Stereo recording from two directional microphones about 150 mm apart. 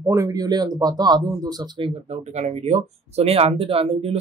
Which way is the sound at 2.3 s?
50° right (ahead or behind).